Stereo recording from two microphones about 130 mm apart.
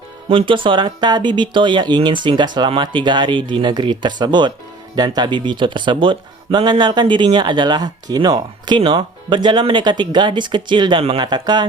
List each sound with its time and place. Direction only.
0.3 s speech: 40° right (ahead or behind)